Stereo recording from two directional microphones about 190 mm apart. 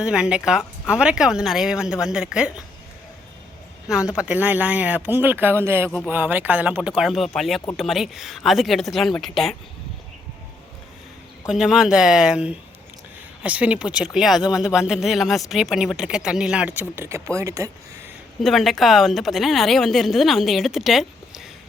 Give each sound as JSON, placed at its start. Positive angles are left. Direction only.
{"t": 0.0, "sound": "a woman's voice", "side_deg": -5}
{"t": 3.8, "sound": "a woman's voice", "side_deg": -5}
{"t": 11.4, "sound": "a woman's voice", "side_deg": -5}
{"t": 18.3, "sound": "a woman's voice", "side_deg": 0}